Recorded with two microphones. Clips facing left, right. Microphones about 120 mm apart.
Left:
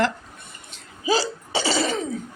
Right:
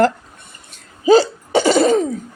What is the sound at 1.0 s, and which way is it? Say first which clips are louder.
Hiccup: right 11 dB; 50° right (ahead or behind).